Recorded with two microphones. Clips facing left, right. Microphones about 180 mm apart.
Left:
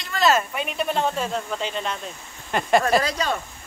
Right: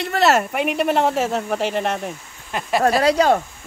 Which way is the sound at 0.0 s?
65° right (ahead or behind).